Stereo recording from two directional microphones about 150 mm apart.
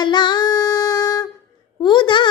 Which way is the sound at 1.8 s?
30° left (ahead or behind).